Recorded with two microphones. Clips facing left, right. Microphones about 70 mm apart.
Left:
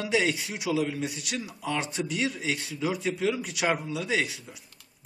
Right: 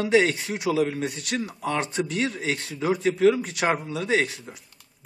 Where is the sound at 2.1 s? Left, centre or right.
Right.